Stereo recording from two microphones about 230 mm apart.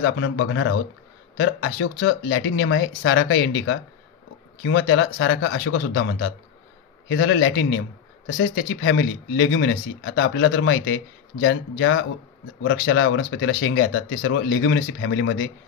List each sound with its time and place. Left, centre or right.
0.0 s speech: left
9.4 s speech: left